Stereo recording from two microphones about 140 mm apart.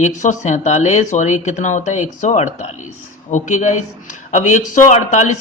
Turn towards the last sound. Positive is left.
turn(degrees=60)  # may be behind; listen again after turning